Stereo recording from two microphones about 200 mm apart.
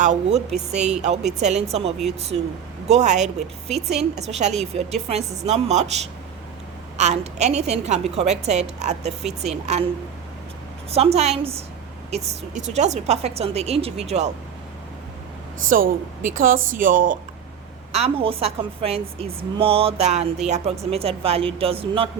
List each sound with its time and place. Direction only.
0.0 s a woman's voice: 35° right (ahead or behind)
10.9 s a woman's voice: 30° right (ahead or behind)
15.7 s speech: 45° right (ahead or behind)
17.9 s a woman's voice: 30° right (ahead or behind)